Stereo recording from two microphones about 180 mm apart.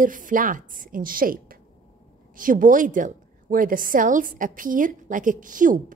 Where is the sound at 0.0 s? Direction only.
45° right (ahead or behind).